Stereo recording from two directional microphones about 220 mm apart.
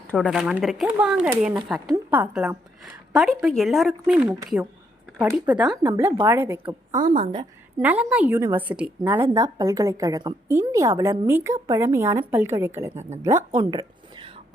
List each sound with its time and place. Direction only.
0.1 s a woman's voice: centre (ahead or behind)
6.9 s a woman's voice: 35° right (ahead or behind)
7.8 s a woman's voice: 5° right (ahead or behind)